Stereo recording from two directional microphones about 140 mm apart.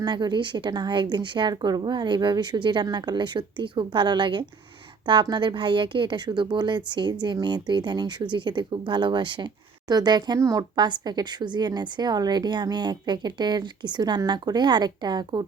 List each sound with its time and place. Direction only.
0.0 s speech: 30° right (ahead or behind)